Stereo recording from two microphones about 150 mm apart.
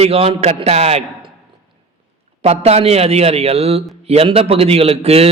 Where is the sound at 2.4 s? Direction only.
45° right (ahead or behind).